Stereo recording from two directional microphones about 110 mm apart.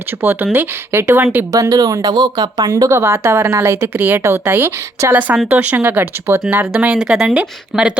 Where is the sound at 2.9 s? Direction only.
25° right (ahead or behind).